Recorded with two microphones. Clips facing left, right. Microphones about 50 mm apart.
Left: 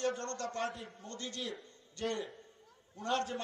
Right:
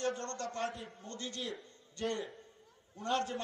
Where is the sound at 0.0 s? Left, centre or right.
Centre.